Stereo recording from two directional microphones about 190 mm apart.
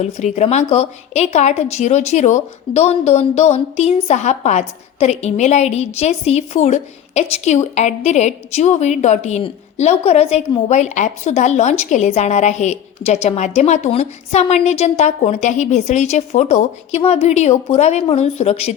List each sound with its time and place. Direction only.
0.0 s a woman's voice: 35° left (ahead or behind)